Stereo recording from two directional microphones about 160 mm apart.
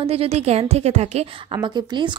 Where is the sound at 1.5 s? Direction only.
30° right (ahead or behind).